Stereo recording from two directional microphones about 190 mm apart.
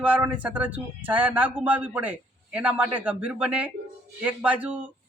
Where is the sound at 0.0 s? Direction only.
10° right (ahead or behind).